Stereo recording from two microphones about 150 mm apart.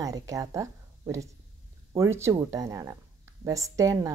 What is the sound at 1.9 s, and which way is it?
A woman's voice, 20° right (ahead or behind).